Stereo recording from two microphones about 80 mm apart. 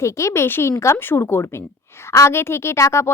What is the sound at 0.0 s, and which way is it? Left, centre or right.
A woman's voice, left.